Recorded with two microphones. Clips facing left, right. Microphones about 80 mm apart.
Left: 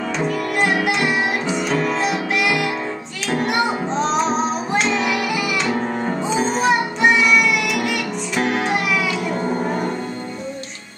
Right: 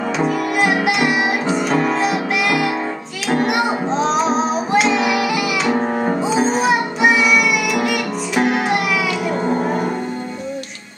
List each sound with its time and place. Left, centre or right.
0.2 s music: centre
5.8 s music: right
6.2 s music: centre